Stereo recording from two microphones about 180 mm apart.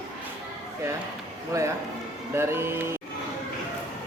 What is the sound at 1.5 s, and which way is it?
A man's voice, 15° right (ahead or behind).